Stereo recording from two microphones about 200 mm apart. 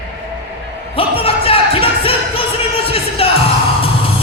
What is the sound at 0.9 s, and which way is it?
Music, 30° left (ahead or behind).